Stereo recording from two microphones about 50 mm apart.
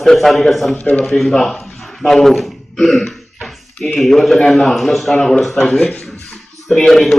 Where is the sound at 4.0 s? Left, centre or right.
Centre.